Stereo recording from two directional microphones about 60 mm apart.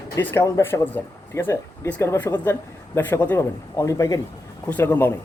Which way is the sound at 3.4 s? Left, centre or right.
Left.